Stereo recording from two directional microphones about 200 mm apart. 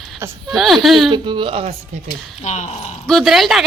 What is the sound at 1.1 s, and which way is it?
Speech, 25° right (ahead or behind).